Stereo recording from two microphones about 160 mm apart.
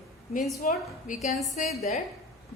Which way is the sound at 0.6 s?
60° left (ahead or behind).